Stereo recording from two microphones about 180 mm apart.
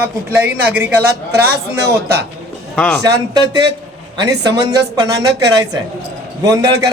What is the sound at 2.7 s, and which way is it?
Speech, 5° left (ahead or behind).